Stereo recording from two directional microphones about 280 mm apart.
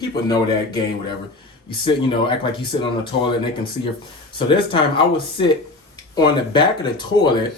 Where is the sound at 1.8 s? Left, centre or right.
Centre.